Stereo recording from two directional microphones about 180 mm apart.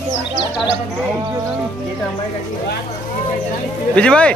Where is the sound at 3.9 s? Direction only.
5° left (ahead or behind).